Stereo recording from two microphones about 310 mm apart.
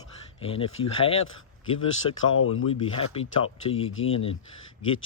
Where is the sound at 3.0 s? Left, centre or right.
Centre.